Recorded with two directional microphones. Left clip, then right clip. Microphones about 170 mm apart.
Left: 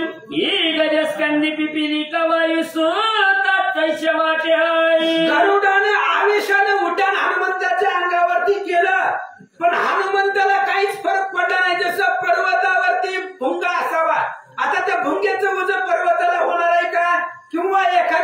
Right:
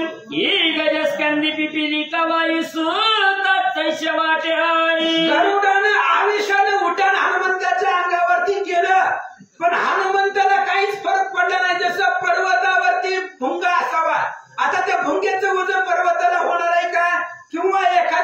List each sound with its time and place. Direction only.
0.4 s mantra: 15° right (ahead or behind)
1.2 s music: 20° right (ahead or behind)
4.5 s music: 20° right (ahead or behind)
5.4 s speech: 10° left (ahead or behind)
9.6 s a sound: 10° left (ahead or behind)
13.9 s a sound: 10° left (ahead or behind)
17.7 s speech: 10° left (ahead or behind)